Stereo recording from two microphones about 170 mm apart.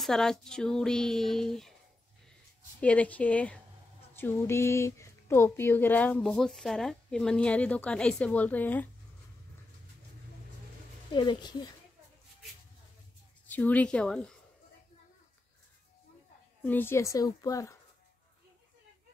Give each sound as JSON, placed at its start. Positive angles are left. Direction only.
{"t": 0.0, "sound": "speech", "side_deg": 0}
{"t": 2.8, "sound": "a woman's voice", "side_deg": 10}
{"t": 11.1, "sound": "speech", "side_deg": 25}
{"t": 13.5, "sound": "a woman's voice", "side_deg": 10}
{"t": 16.6, "sound": "a woman's voice", "side_deg": 10}